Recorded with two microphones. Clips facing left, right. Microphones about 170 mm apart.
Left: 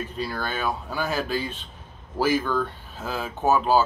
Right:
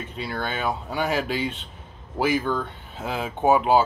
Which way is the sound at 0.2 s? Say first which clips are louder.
Right 1 dB; 20° right (ahead or behind).